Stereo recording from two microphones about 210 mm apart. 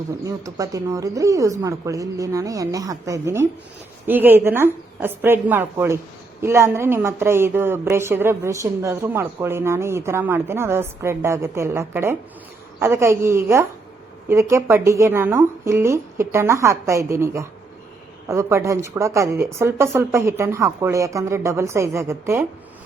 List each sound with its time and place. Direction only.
0.3 s speech: 15° right (ahead or behind)